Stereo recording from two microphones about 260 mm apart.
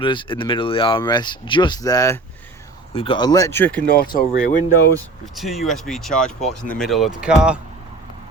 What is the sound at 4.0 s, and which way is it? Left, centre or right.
Speech, left.